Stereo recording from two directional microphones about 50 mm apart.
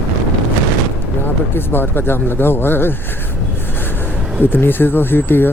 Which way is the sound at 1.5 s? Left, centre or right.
Left.